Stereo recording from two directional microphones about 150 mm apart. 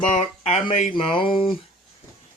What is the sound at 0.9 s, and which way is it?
Speech, 35° left (ahead or behind).